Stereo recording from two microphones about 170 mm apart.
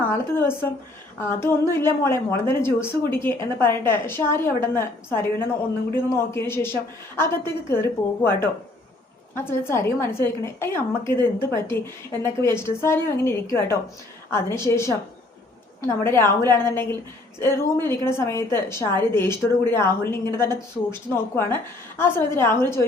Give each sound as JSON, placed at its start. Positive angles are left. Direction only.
{"t": 0.1, "sound": "a woman's voice", "side_deg": 15}